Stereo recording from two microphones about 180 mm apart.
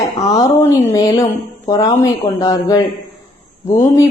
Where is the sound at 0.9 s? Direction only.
20° left (ahead or behind).